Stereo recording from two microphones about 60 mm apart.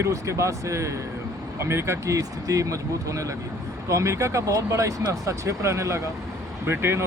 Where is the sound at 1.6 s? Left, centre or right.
Right.